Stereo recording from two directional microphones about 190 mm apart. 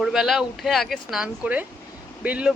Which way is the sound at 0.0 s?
Centre (ahead or behind).